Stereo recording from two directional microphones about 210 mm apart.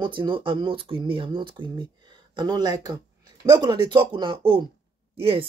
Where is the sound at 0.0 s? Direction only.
25° right (ahead or behind).